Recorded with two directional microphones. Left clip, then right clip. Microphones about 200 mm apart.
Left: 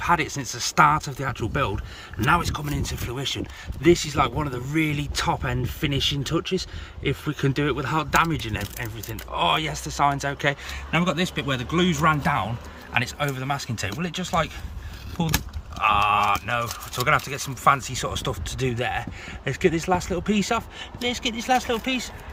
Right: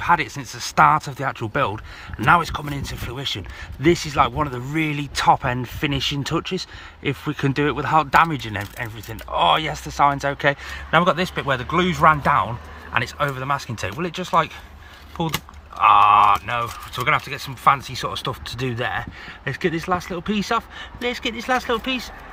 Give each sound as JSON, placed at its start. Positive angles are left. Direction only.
{"t": 0.0, "sound": "speech", "side_deg": 15}